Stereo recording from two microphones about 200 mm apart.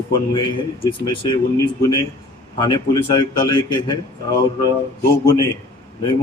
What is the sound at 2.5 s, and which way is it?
Speech, 20° left (ahead or behind).